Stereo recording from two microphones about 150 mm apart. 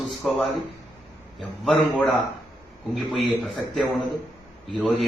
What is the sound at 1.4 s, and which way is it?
A man's voice, 5° left (ahead or behind).